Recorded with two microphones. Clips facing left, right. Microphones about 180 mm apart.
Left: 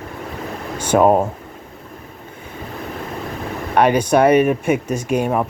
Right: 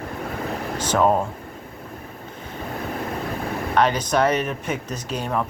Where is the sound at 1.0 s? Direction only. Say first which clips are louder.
Left 5 dB; 45° left (ahead or behind).